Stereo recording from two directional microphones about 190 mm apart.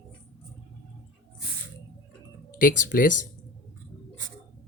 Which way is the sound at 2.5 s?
45° left (ahead or behind).